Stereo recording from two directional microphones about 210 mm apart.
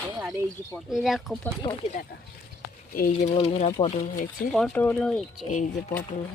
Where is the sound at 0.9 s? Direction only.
Centre (ahead or behind).